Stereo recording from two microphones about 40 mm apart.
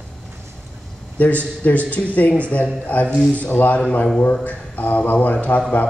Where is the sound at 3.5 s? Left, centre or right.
Left.